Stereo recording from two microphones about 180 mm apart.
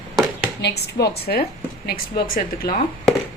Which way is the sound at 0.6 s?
65° left (ahead or behind).